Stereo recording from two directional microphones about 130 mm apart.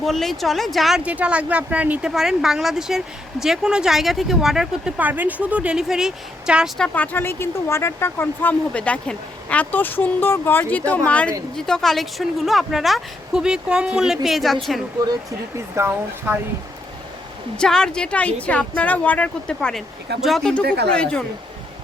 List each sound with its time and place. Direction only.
0.0 s speech: centre (ahead or behind)
6.7 s speech: 10° left (ahead or behind)
15.5 s speech: 20° right (ahead or behind)
17.6 s speech: 5° left (ahead or behind)